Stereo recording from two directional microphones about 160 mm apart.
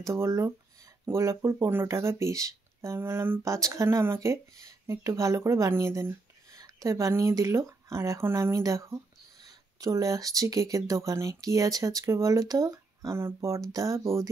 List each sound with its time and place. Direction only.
0.0 s speech: 20° right (ahead or behind)